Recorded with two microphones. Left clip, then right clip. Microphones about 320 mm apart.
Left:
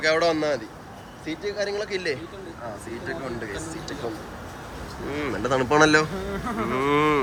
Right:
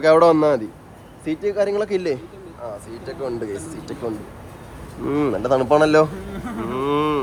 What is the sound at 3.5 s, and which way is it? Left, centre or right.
Speech, centre.